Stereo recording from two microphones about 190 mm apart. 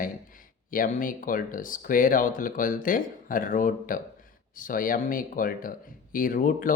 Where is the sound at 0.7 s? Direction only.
45° left (ahead or behind).